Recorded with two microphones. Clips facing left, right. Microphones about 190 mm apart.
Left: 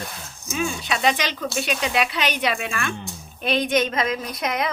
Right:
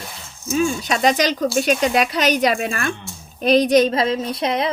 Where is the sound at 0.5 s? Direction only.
40° right (ahead or behind).